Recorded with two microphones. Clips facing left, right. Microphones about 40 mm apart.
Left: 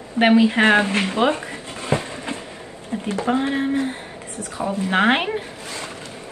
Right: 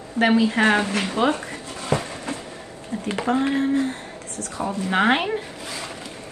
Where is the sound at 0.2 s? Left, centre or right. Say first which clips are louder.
Left 3 dB; left.